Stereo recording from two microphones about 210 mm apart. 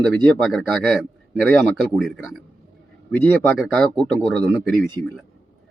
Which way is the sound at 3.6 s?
Centre (ahead or behind).